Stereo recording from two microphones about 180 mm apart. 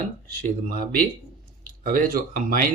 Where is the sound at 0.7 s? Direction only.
55° right (ahead or behind).